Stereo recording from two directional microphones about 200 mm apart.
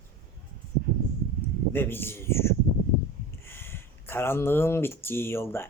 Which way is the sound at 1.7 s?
10° left (ahead or behind).